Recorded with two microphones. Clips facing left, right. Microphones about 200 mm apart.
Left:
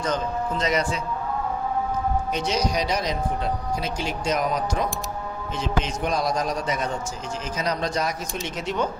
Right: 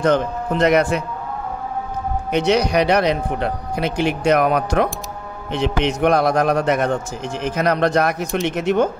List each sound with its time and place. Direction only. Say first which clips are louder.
0.0 s speech: right 8 dB; 65° right (ahead or behind)
2.3 s speech: right 12 dB; 65° right (ahead or behind)